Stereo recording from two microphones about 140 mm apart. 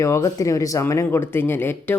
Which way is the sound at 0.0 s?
20° left (ahead or behind).